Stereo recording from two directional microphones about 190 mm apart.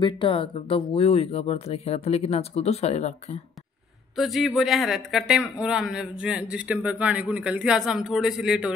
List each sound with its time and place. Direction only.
0.0 s speech: 25° left (ahead or behind)
4.2 s a man's voice: centre (ahead or behind)